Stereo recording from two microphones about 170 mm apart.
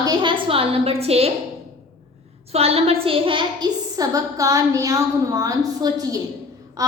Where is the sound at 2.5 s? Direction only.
35° right (ahead or behind).